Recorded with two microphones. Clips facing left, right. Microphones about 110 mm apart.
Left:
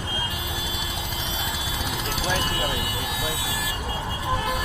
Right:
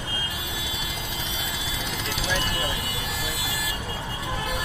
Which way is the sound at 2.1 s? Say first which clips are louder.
Left 2 dB; 45° left (ahead or behind).